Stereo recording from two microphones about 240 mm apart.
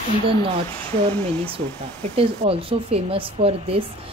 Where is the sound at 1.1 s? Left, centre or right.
Centre.